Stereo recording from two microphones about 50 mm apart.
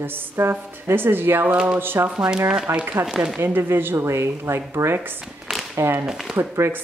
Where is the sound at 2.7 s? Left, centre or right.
Right.